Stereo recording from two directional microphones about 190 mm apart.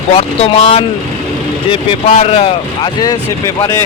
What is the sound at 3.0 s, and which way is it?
Speech, 20° left (ahead or behind).